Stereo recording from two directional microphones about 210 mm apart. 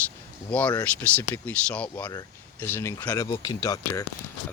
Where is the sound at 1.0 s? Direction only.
5° left (ahead or behind).